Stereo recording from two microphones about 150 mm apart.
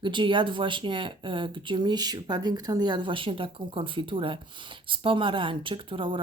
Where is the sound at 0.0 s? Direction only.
35° right (ahead or behind).